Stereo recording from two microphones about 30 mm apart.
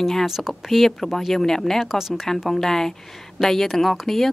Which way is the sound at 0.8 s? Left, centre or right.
Centre.